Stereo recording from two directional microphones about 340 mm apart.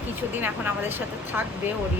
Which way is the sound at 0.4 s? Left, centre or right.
Centre.